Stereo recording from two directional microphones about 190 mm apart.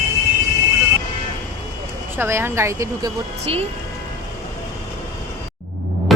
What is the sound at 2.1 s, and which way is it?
Speech, 10° right (ahead or behind).